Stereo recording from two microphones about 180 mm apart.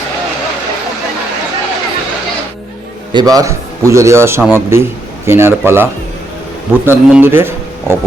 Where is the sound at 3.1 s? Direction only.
20° right (ahead or behind).